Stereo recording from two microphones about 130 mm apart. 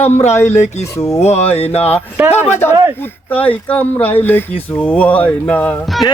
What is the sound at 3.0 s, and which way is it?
Speech, 15° left (ahead or behind).